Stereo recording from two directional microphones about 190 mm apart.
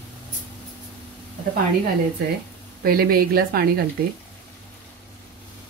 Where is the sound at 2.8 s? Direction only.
55° right (ahead or behind).